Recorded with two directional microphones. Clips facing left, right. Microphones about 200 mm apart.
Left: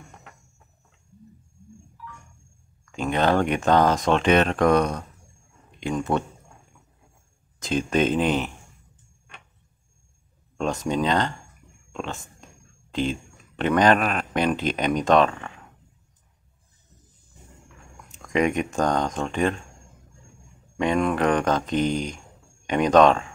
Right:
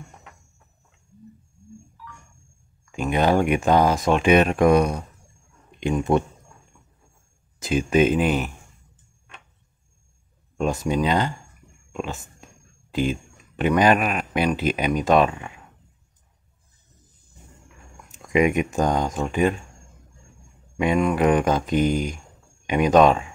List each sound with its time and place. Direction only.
2.8 s speech: 10° right (ahead or behind)
7.6 s speech: 10° right (ahead or behind)
10.6 s speech: 10° right (ahead or behind)
18.3 s speech: 10° right (ahead or behind)
20.7 s speech: 10° right (ahead or behind)